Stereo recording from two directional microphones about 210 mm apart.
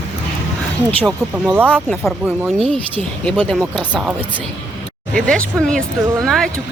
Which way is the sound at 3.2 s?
5° left (ahead or behind).